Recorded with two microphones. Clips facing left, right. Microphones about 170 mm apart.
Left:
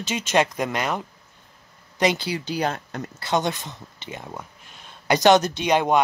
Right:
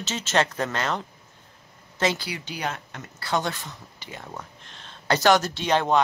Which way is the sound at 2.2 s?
35° left (ahead or behind).